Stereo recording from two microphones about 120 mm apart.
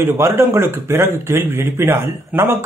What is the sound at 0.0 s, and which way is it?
Speech, 20° right (ahead or behind).